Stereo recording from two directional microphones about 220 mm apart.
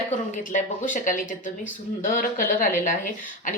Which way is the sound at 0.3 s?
35° left (ahead or behind).